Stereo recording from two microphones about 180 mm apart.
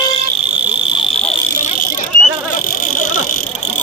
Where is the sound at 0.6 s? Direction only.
5° right (ahead or behind).